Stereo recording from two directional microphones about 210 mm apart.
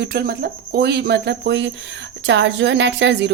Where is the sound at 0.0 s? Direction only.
50° right (ahead or behind).